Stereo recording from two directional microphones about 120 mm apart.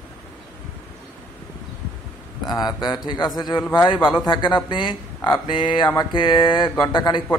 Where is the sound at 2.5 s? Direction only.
35° left (ahead or behind).